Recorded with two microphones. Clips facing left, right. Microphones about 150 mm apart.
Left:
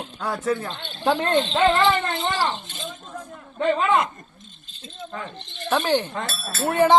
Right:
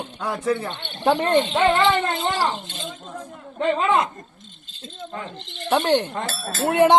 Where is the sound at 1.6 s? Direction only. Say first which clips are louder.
Left 2 dB; 20° right (ahead or behind).